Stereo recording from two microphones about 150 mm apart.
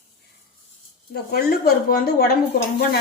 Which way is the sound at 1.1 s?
90° left.